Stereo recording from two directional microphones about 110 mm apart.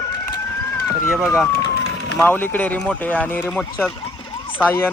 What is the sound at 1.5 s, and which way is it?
Speech, 30° left (ahead or behind).